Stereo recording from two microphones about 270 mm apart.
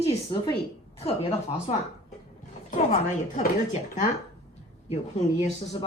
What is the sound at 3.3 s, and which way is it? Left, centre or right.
Speech, left.